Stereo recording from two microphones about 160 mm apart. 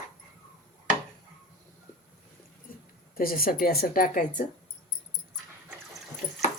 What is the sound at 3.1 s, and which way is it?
A woman's voice, 65° left (ahead or behind).